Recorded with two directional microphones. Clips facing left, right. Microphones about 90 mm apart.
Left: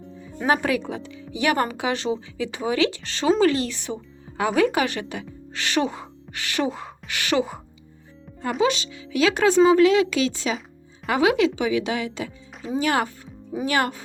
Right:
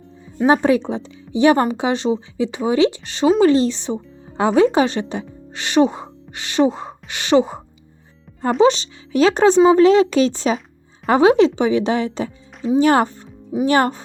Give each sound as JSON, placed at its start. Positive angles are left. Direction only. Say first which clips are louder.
{"t": 0.4, "sound": "a woman's voice", "louder": "right 7 dB", "side_deg": -25}
{"t": 8.3, "sound": "music", "louder": "left 2 dB", "side_deg": 0}
{"t": 8.6, "sound": "a woman's voice", "louder": "right 7 dB", "side_deg": -35}